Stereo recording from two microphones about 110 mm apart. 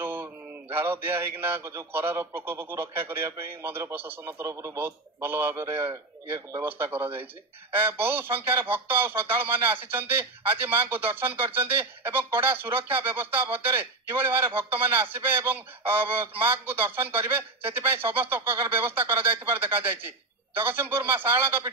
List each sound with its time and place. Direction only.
0.0 s mantra: 20° right (ahead or behind)
0.7 s speech: 20° right (ahead or behind)